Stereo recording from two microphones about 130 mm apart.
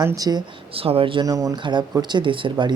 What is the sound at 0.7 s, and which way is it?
Speech, 45° right (ahead or behind).